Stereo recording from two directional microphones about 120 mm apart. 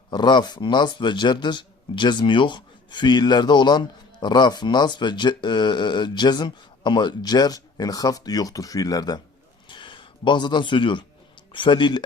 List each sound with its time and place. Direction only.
0.1 s speech: 40° left (ahead or behind)
9.6 s a sound: 40° left (ahead or behind)
11.5 s speech: 45° left (ahead or behind)